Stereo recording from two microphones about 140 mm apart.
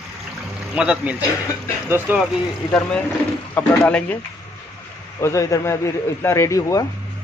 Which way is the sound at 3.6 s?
10° left (ahead or behind).